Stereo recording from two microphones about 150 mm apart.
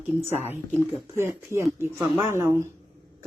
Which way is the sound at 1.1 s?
15° right (ahead or behind).